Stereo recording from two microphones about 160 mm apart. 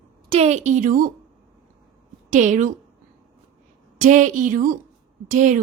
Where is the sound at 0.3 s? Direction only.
40° right (ahead or behind).